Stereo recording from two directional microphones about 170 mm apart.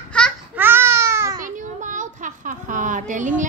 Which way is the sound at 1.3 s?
50° right (ahead or behind).